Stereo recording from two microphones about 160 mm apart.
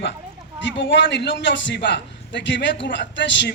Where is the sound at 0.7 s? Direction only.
90° left.